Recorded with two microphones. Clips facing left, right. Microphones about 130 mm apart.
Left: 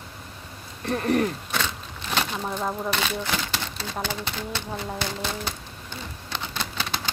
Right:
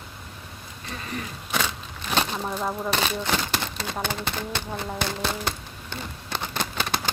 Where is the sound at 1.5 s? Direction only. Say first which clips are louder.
Right 1 dB; 10° right (ahead or behind).